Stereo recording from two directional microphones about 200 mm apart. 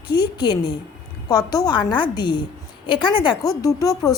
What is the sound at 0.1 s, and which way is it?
A woman's voice, 20° left (ahead or behind).